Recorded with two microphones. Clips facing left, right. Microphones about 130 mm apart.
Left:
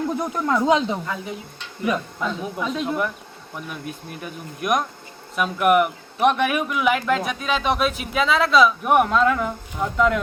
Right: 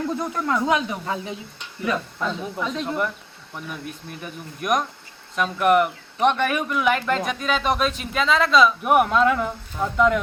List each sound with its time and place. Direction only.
0.1 s speech: 15° left (ahead or behind)
1.0 s speech: 20° right (ahead or behind)
1.8 s speech: 10° left (ahead or behind)